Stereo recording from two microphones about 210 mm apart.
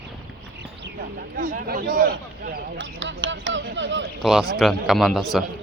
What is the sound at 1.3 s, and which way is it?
Speech, 45° right (ahead or behind).